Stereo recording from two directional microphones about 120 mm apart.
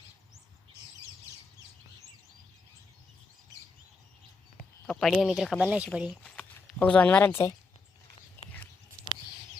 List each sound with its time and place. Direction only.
4.9 s speech: centre (ahead or behind)
5.6 s speech: 10° right (ahead or behind)
6.7 s speech: 10° left (ahead or behind)
8.4 s a sound: 15° left (ahead or behind)